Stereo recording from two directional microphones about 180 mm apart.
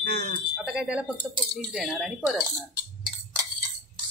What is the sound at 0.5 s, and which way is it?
Speech, 5° right (ahead or behind).